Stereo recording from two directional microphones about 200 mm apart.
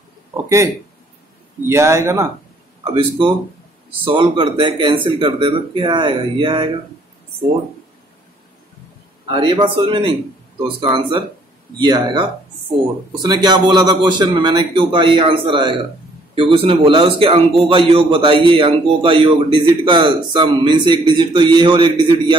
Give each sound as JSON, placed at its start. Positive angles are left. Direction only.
{"t": 1.7, "sound": "speech", "side_deg": -15}
{"t": 2.8, "sound": "a man's voice", "side_deg": -25}
{"t": 9.3, "sound": "a man's voice", "side_deg": -20}